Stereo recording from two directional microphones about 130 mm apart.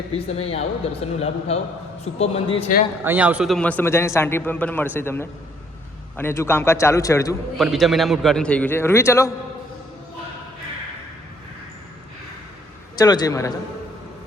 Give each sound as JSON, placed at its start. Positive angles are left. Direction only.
{"t": 0.1, "sound": "a man's voice", "side_deg": 50}
{"t": 3.0, "sound": "a man's voice", "side_deg": -15}
{"t": 3.5, "sound": "a man's voice", "side_deg": 10}
{"t": 7.6, "sound": "a man's voice", "side_deg": 0}
{"t": 13.0, "sound": "a man's voice", "side_deg": 30}